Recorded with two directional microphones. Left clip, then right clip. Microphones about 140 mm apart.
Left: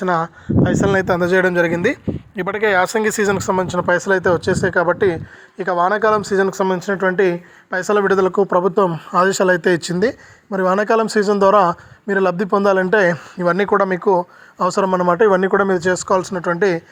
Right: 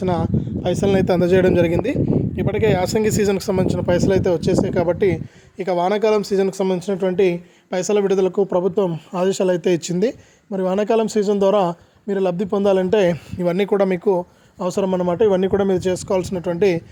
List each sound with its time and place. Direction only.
0.0 s speech: 30° right (ahead or behind)